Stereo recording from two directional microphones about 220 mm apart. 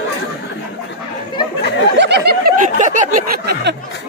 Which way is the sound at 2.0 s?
50° right (ahead or behind).